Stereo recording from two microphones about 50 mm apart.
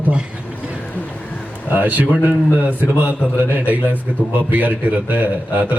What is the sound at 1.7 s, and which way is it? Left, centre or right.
A man's voice, right.